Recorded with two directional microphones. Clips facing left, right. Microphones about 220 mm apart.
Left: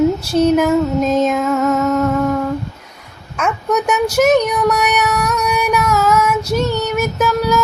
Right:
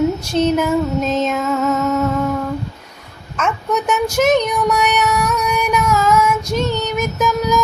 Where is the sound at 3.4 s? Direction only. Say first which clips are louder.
Left 2 dB; 10° left (ahead or behind).